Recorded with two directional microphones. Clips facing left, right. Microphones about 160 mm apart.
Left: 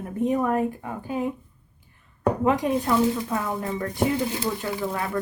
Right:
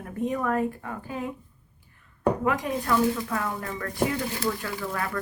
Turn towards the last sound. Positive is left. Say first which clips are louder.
# left 3 dB
turn(degrees=20)  # may be behind; listen again after turning